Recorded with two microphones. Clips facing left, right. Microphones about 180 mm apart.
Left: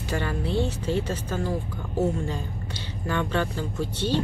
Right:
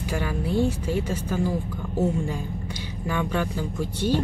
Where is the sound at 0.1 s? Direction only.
10° right (ahead or behind).